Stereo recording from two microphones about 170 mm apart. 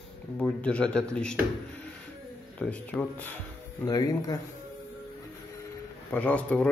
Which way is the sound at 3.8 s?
20° left (ahead or behind).